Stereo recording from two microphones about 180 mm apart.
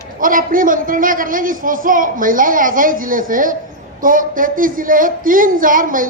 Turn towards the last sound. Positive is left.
turn(degrees=-50)  # may be behind; listen again after turning